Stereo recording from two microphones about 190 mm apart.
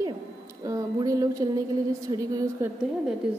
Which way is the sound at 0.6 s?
20° right (ahead or behind).